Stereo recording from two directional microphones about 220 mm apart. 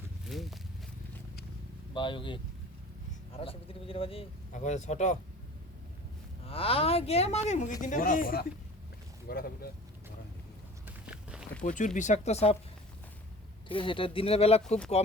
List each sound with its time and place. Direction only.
0.3 s speech: centre (ahead or behind)
1.9 s speech: 20° left (ahead or behind)
6.4 s speech: 25° left (ahead or behind); by 9.5 s 40° left (ahead or behind)
10.8 s walk: 5° right (ahead or behind)
11.6 s speech: 35° left (ahead or behind)
13.7 s speech: 25° left (ahead or behind)